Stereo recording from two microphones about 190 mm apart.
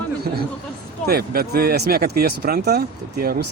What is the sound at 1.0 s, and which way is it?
Speech, 55° right (ahead or behind).